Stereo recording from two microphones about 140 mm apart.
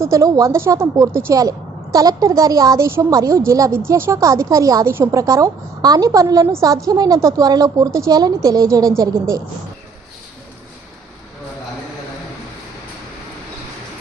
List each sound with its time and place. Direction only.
0.0 s a woman's voice: 25° right (ahead or behind)